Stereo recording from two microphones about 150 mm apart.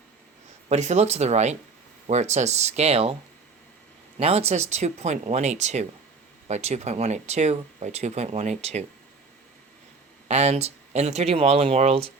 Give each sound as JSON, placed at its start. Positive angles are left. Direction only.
{"t": 0.7, "sound": "speech", "side_deg": -50}
{"t": 4.2, "sound": "speech", "side_deg": -45}
{"t": 10.2, "sound": "speech", "side_deg": -45}